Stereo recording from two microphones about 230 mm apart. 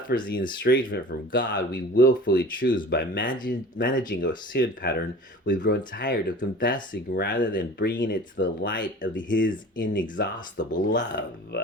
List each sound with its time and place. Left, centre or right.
0.1 s speech: left
10.9 s speech: left